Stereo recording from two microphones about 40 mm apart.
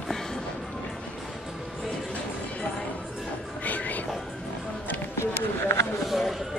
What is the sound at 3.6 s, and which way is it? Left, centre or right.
Train, left.